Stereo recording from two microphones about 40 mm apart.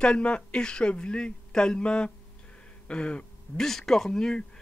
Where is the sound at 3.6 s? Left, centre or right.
Centre.